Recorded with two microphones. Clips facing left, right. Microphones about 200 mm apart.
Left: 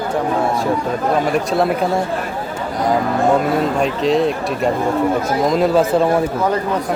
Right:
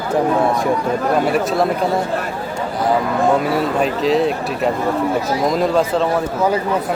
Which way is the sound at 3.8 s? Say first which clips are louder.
Right 1 dB; centre (ahead or behind).